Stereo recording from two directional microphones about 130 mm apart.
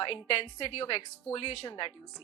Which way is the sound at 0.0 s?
40° left (ahead or behind).